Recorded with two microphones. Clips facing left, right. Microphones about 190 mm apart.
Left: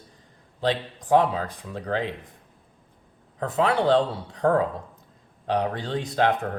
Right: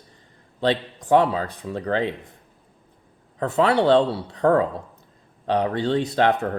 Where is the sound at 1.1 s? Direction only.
65° right (ahead or behind).